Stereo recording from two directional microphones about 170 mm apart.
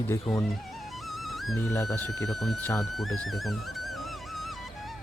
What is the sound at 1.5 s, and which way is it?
Speech, 20° left (ahead or behind).